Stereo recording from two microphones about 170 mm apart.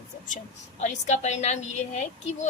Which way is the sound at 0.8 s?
45° left (ahead or behind).